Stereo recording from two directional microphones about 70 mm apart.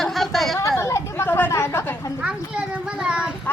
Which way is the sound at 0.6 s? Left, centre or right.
Left.